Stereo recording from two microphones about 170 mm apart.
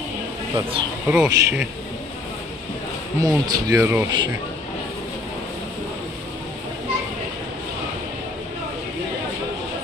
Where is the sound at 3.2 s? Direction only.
20° right (ahead or behind).